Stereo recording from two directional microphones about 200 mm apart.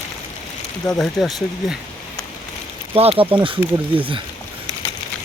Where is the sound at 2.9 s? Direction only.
30° right (ahead or behind).